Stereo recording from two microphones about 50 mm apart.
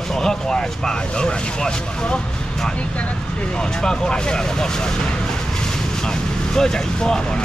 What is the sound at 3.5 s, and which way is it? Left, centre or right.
Speech, centre.